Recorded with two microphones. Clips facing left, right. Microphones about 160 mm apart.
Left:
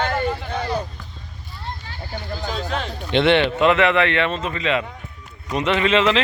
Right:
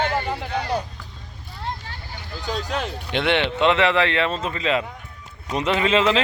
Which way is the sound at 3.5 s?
25° right (ahead or behind).